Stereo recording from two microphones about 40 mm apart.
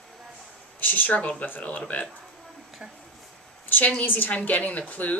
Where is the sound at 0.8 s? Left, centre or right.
Left.